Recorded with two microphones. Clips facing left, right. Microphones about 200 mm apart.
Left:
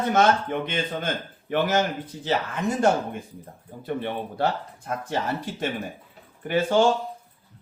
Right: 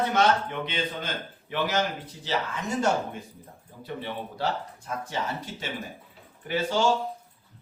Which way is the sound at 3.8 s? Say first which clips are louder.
Left 6 dB; 55° left (ahead or behind).